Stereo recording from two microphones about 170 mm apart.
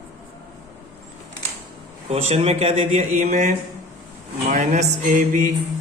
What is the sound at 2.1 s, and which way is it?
Speech, 35° right (ahead or behind).